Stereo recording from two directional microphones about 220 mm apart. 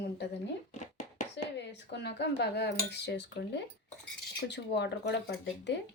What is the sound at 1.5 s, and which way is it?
Speech, 50° left (ahead or behind).